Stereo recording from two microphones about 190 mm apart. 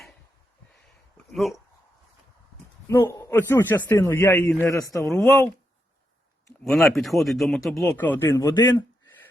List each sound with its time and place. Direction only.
1.1 s a sound: centre (ahead or behind)
2.8 s a man's voice: 15° left (ahead or behind)
5.0 s speech: centre (ahead or behind)
6.7 s speech: centre (ahead or behind); by 8.6 s 15° left (ahead or behind)